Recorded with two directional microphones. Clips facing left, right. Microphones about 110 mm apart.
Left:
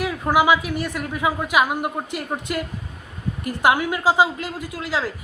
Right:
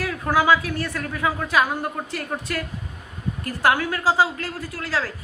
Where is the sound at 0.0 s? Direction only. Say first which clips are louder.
Left 2 dB; 15° left (ahead or behind).